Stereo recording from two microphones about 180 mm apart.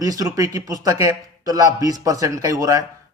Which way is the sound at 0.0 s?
20° right (ahead or behind).